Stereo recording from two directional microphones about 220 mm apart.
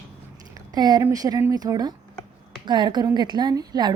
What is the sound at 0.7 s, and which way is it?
A woman's voice, 15° right (ahead or behind).